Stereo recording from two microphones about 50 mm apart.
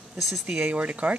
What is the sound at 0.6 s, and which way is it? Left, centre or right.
Speech, right.